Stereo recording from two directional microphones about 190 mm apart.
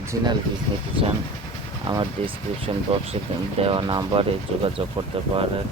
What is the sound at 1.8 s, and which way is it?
Speech, 25° right (ahead or behind).